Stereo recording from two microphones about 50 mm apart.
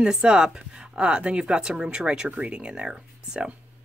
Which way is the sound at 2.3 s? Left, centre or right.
Right.